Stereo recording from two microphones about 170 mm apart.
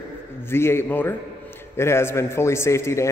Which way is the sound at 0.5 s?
15° left (ahead or behind).